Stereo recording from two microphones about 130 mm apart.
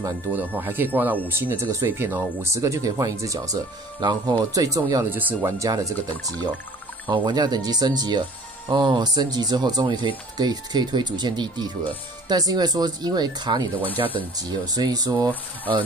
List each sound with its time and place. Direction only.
0.6 s speech: 15° right (ahead or behind)